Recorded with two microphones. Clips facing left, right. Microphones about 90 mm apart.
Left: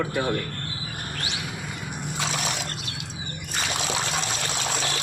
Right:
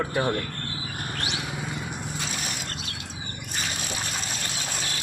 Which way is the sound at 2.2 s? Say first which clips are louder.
Left 5 dB; 90° left.